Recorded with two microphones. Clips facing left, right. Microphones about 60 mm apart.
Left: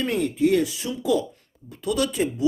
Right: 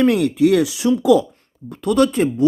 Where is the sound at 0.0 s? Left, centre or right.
Right.